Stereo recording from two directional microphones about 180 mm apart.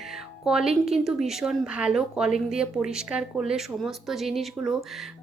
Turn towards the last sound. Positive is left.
turn(degrees=0)  # may be behind; listen again after turning